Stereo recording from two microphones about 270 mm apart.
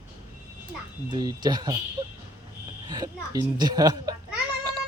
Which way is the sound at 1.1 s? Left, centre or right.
Centre.